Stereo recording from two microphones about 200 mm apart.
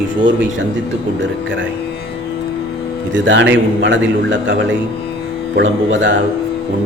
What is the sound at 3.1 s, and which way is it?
A man's voice, 65° right (ahead or behind).